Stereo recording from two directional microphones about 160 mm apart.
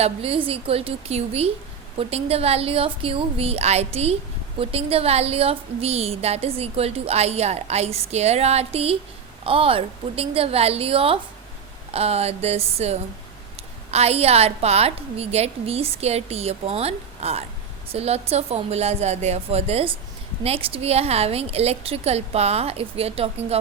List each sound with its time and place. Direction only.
0.0 s a woman's voice: 35° right (ahead or behind)